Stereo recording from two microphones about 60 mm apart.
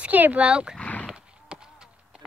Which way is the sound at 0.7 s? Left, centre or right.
Left.